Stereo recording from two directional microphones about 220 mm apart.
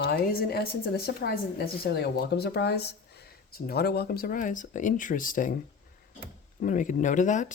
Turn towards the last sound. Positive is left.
turn(degrees=35)  # may be behind; listen again after turning